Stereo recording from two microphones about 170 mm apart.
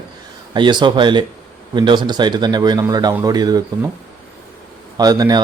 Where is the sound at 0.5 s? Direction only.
25° right (ahead or behind).